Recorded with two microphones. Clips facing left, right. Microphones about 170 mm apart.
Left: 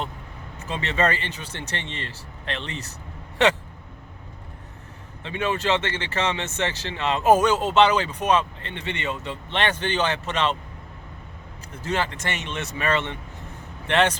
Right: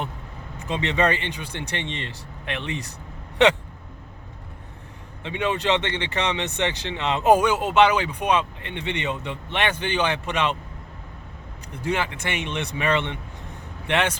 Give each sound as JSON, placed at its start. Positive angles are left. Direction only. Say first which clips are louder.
{"t": 0.6, "sound": "speech", "louder": "right 2 dB", "side_deg": -15}
{"t": 5.2, "sound": "speech", "louder": "right 1 dB", "side_deg": -20}
{"t": 11.8, "sound": "speech", "louder": "right 1 dB", "side_deg": -10}